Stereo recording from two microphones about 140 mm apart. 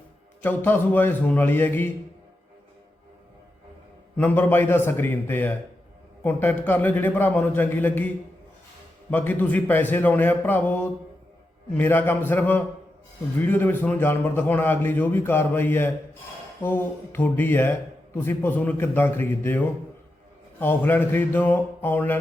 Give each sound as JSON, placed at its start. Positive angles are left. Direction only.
{"t": 0.4, "sound": "speech", "side_deg": 15}
{"t": 4.2, "sound": "speech", "side_deg": 15}